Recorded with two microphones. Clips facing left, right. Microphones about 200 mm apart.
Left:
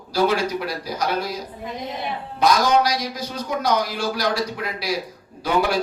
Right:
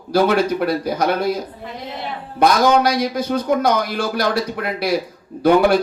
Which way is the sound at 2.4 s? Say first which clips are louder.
Right 4 dB; 55° right (ahead or behind).